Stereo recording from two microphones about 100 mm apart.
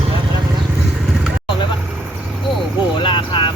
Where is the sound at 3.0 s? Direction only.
55° left (ahead or behind).